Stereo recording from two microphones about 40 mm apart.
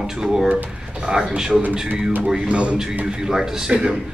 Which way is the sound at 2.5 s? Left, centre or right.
Right.